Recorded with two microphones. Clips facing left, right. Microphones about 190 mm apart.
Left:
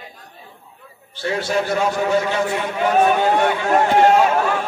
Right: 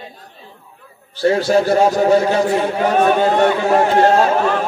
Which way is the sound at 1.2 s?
35° right (ahead or behind).